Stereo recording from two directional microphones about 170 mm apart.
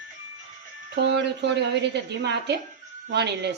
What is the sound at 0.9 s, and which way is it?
A woman's voice, 90° right.